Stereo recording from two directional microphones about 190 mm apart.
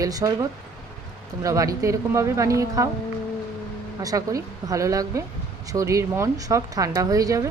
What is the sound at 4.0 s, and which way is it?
Speech, 20° right (ahead or behind).